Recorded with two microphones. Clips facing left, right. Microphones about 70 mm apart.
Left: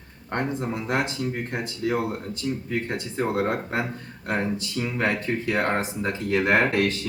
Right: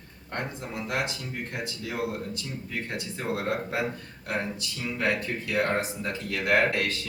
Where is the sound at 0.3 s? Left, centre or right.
Left.